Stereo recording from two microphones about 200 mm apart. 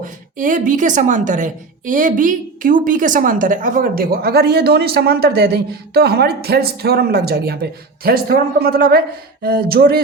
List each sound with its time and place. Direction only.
0.0 s a woman's voice: 40° right (ahead or behind)